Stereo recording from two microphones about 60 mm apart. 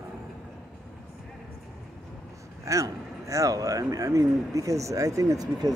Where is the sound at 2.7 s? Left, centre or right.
Right.